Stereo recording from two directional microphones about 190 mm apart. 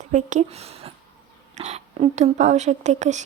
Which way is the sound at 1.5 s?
35° right (ahead or behind).